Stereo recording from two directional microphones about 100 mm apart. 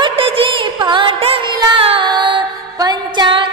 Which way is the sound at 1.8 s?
70° right (ahead or behind).